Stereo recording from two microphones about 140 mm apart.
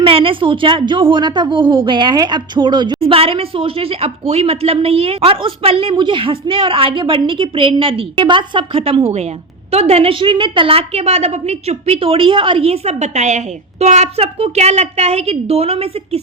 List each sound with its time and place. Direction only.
0.0 s a woman's voice: 40° right (ahead or behind)